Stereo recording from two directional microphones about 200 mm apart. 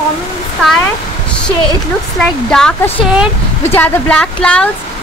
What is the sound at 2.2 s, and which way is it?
A woman's voice, 5° left (ahead or behind).